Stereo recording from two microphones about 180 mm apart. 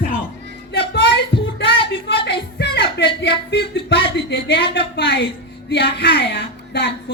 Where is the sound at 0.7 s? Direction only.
65° left (ahead or behind).